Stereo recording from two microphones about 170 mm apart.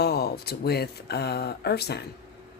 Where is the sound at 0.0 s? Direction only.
70° left (ahead or behind).